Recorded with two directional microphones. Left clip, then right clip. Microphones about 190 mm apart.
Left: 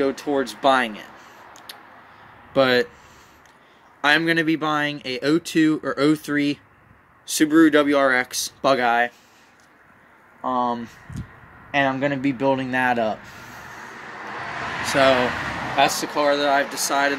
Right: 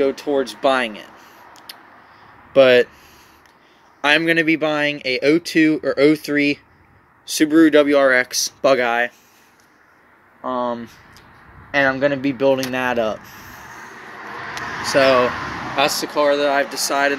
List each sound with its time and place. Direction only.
0.0 s speech: 20° left (ahead or behind)
4.0 s speech: 15° left (ahead or behind)
10.5 s speech: 25° left (ahead or behind)
13.3 s a sound: 25° left (ahead or behind)
14.8 s speech: 15° left (ahead or behind)